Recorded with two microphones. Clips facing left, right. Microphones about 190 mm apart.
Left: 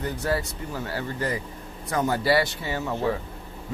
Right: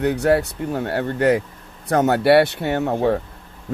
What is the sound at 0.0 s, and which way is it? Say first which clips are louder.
Speech: right 10 dB; 70° right (ahead or behind).